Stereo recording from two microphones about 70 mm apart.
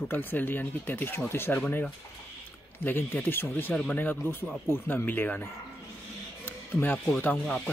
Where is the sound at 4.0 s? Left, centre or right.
Left.